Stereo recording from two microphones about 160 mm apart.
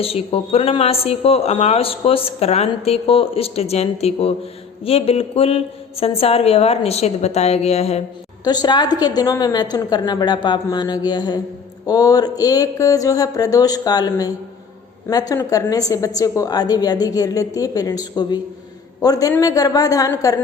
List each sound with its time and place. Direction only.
0.0 s speech: 35° left (ahead or behind)
8.4 s a woman's voice: 25° left (ahead or behind)